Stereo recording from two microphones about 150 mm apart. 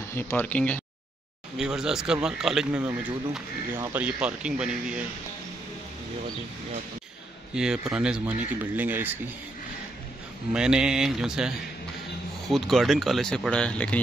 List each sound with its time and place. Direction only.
0.1 s speech: 15° left (ahead or behind)
1.6 s speech: 5° right (ahead or behind)
7.5 s speech: 5° right (ahead or behind)
10.5 s speech: 5° right (ahead or behind)